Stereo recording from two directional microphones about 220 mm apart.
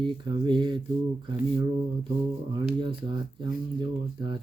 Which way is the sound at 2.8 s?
20° right (ahead or behind).